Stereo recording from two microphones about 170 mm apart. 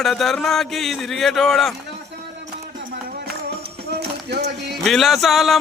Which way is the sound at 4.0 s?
75° right (ahead or behind).